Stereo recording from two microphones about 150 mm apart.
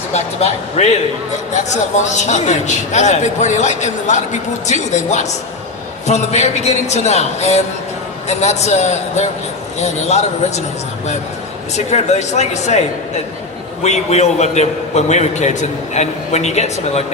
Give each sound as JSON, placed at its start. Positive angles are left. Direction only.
{"t": 0.1, "sound": "a man's voice", "side_deg": 45}
{"t": 2.0, "sound": "a man's voice", "side_deg": 50}
{"t": 11.7, "sound": "a man's voice", "side_deg": 50}
{"t": 13.8, "sound": "a man's voice", "side_deg": 50}